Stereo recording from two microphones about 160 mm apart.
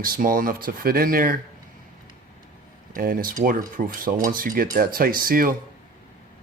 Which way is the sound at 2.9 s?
60° right (ahead or behind).